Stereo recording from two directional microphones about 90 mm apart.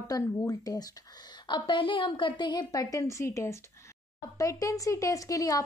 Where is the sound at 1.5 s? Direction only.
65° left (ahead or behind).